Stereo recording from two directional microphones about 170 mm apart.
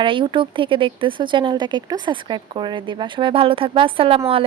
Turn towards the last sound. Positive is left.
turn(degrees=-35)  # may be behind; listen again after turning